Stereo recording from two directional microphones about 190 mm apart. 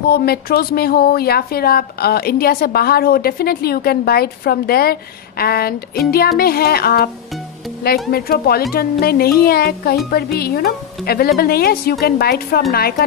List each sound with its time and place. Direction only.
0.1 s speech: 55° left (ahead or behind)
8.1 s speech: 55° left (ahead or behind)